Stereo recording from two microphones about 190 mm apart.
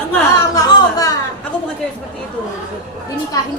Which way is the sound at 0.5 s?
20° left (ahead or behind).